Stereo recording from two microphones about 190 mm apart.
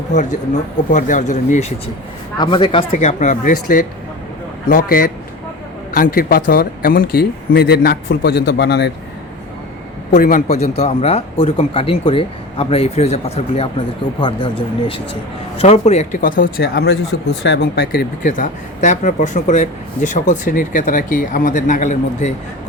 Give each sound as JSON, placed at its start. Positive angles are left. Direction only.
{"t": 0.1, "sound": "speech", "side_deg": 40}
{"t": 2.4, "sound": "speech", "side_deg": 25}
{"t": 3.0, "sound": "speech", "side_deg": 35}
{"t": 10.2, "sound": "speech", "side_deg": 45}